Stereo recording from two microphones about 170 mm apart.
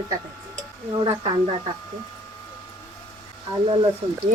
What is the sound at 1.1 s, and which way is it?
Speech, 30° right (ahead or behind).